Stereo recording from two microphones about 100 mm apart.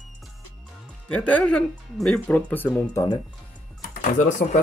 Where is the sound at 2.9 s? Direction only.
40° left (ahead or behind).